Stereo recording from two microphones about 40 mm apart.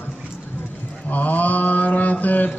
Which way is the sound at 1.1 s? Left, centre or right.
Left.